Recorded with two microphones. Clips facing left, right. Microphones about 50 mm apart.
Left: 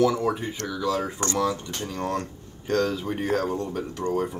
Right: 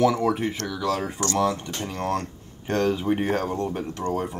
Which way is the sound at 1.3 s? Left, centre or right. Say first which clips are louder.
Right 3 dB; right.